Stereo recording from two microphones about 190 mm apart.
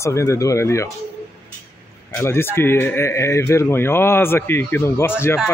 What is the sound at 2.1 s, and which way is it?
Speech, 15° left (ahead or behind).